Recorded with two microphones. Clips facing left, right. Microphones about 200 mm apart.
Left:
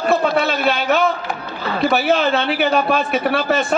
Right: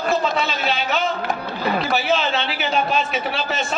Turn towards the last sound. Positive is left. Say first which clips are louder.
# left 7 dB
turn(degrees=60)  # may be behind; listen again after turning